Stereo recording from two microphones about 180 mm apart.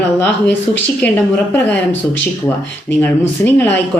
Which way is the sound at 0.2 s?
10° left (ahead or behind).